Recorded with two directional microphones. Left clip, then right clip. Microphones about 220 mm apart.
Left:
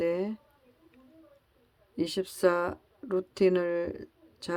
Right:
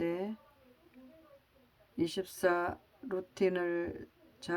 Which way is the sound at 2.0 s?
30° left (ahead or behind).